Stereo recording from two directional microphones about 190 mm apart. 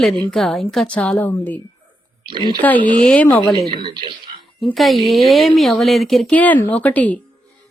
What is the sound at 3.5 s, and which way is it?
Speech, 25° right (ahead or behind).